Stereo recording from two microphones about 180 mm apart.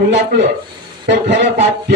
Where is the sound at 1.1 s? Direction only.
75° right (ahead or behind).